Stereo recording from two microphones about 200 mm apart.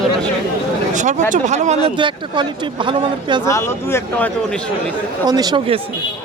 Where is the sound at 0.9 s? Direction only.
35° right (ahead or behind).